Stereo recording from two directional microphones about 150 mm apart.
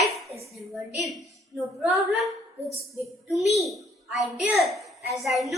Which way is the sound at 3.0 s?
Centre (ahead or behind).